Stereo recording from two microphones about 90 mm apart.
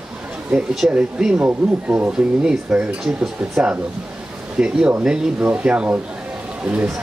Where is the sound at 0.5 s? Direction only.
5° right (ahead or behind).